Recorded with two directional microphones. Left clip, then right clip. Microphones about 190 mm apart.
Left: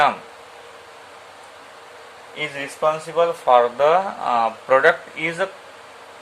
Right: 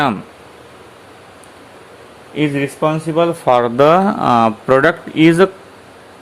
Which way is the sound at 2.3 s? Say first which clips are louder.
Right 9 dB; 50° right (ahead or behind).